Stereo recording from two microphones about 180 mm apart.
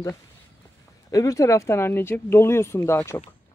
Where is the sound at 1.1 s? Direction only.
20° left (ahead or behind).